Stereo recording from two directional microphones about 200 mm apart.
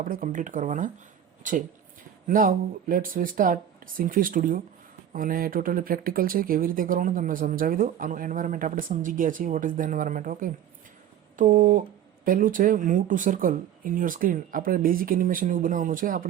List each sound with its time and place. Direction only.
0.0 s speech: 45° right (ahead or behind)